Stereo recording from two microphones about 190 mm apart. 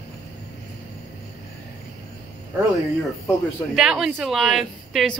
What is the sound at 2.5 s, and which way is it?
Speech, 10° right (ahead or behind).